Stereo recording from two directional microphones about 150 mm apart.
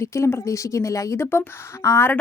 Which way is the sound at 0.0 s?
20° left (ahead or behind).